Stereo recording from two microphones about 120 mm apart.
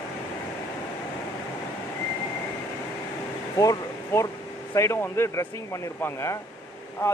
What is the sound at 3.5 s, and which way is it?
Speech, 30° left (ahead or behind).